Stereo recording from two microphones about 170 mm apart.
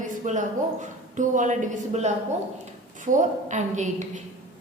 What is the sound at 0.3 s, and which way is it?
A woman's voice, 45° right (ahead or behind).